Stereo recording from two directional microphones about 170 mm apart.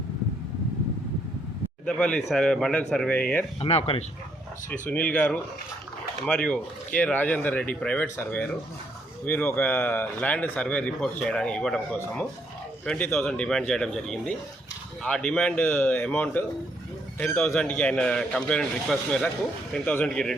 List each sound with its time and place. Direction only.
2.0 s speech: 5° left (ahead or behind)
3.6 s speech: 35° left (ahead or behind)
4.7 s speech: 10° left (ahead or behind)